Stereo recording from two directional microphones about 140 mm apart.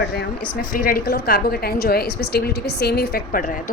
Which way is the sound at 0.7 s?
85° left.